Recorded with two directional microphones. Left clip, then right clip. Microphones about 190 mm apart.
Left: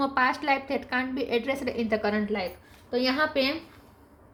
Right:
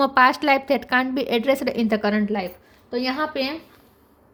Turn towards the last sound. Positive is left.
turn(degrees=-45)  # may be behind; listen again after turning